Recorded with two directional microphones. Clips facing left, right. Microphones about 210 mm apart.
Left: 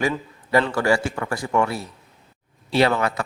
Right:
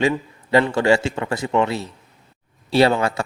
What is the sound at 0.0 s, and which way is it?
A man's voice, 25° right (ahead or behind).